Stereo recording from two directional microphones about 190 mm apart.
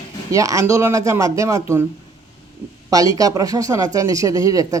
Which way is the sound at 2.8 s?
20° right (ahead or behind).